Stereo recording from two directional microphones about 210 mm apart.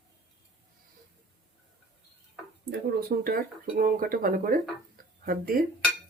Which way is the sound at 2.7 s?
45° right (ahead or behind).